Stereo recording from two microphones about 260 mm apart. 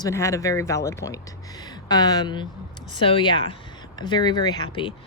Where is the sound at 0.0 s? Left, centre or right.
Centre.